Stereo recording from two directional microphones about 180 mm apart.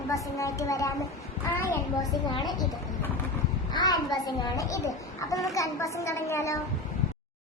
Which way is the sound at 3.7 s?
20° left (ahead or behind).